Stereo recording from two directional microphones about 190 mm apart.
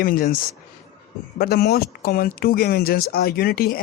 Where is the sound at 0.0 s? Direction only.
50° left (ahead or behind).